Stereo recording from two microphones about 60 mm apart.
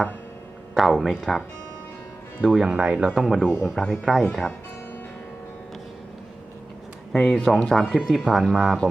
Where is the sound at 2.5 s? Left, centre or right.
Centre.